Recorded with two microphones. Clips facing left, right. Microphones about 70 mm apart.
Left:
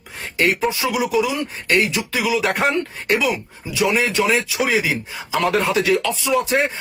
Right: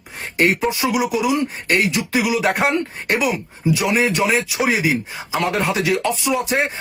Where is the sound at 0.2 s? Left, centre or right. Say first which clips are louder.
Right 1 dB; right.